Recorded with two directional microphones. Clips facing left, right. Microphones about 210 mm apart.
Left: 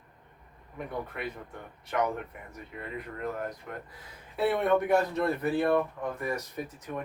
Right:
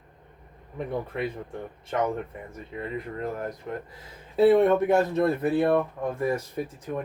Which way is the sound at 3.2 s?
30° right (ahead or behind).